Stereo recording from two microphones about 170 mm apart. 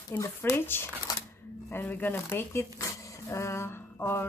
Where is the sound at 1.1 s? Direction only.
20° left (ahead or behind).